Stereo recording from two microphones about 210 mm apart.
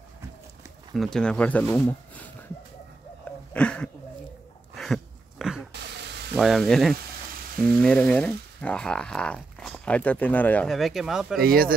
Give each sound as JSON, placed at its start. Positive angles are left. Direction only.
{"t": 0.9, "sound": "speech", "side_deg": 0}
{"t": 3.5, "sound": "a sound", "side_deg": 5}
{"t": 6.3, "sound": "speech", "side_deg": 0}
{"t": 11.4, "sound": "speech", "side_deg": -45}